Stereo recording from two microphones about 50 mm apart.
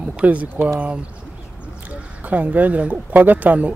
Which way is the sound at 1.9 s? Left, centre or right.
Right.